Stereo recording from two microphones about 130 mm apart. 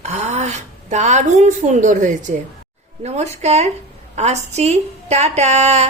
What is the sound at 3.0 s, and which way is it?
A woman's voice, 55° right (ahead or behind).